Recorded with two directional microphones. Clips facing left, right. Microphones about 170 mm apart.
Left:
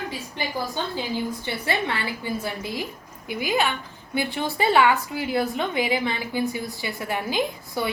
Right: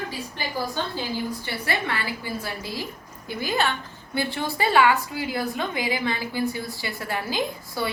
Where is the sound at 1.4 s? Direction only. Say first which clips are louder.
Left 2 dB; 20° left (ahead or behind).